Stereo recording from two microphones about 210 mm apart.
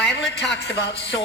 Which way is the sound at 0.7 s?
50° left (ahead or behind).